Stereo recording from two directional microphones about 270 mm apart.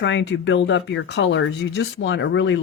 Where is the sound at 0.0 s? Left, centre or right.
Left.